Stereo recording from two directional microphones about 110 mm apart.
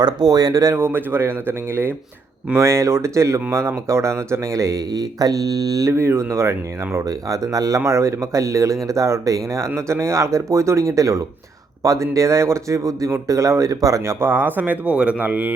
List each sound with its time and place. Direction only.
0.3 s speech: 35° right (ahead or behind); by 15.5 s 15° right (ahead or behind)